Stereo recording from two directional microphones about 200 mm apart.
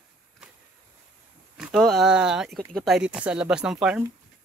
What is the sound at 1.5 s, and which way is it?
Speech, centre (ahead or behind).